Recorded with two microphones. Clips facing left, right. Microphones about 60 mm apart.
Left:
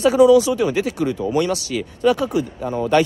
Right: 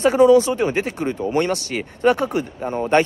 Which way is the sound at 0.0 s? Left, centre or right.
Right.